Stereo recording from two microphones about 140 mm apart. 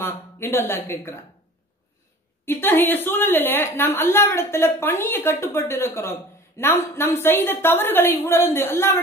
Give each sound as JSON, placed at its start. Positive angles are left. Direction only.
{"t": 0.0, "sound": "a woman's voice", "side_deg": 15}
{"t": 2.4, "sound": "a woman's voice", "side_deg": 15}